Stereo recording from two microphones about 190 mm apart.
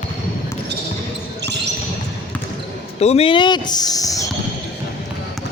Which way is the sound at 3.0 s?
30° left (ahead or behind).